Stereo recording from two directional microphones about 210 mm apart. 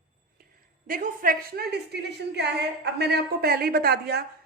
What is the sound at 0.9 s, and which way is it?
A woman's voice, 40° right (ahead or behind).